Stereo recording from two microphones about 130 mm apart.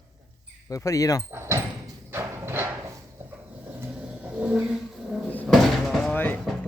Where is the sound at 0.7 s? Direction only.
25° left (ahead or behind).